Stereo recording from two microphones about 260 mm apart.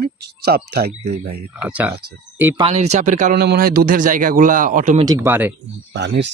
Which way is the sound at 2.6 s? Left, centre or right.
Right.